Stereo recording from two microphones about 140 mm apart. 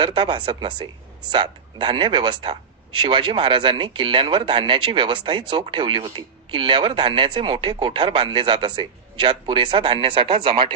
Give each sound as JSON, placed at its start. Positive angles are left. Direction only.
{"t": 0.0, "sound": "speech", "side_deg": -35}